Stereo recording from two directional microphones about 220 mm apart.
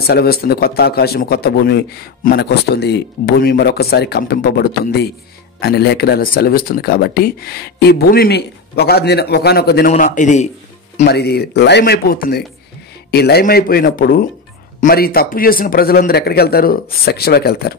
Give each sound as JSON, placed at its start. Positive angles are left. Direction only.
{"t": 0.0, "sound": "speech", "side_deg": 45}
{"t": 11.1, "sound": "speech", "side_deg": 45}